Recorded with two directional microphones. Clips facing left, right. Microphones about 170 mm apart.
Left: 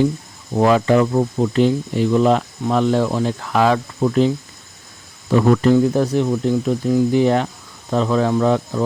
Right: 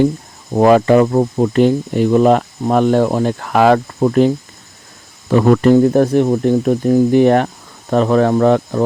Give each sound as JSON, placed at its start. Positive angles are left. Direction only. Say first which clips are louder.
{"t": 0.5, "sound": "speech", "louder": "right 5 dB", "side_deg": -50}
{"t": 5.3, "sound": "speech", "louder": "right 4 dB", "side_deg": -60}